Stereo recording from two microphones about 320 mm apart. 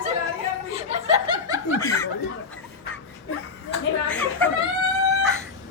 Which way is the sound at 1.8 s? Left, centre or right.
Centre.